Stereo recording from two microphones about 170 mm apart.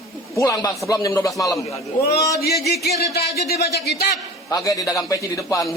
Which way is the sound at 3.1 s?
70° left (ahead or behind).